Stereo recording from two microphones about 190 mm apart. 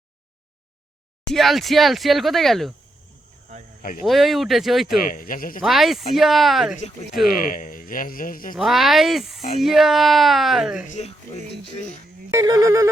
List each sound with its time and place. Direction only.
1.3 s speech: centre (ahead or behind)
4.0 s speech: centre (ahead or behind)
4.9 s speech: 50° left (ahead or behind)
5.6 s speech: centre (ahead or behind)
7.3 s speech: 45° left (ahead or behind)
8.5 s speech: centre (ahead or behind)
12.3 s wind instrument: 20° right (ahead or behind)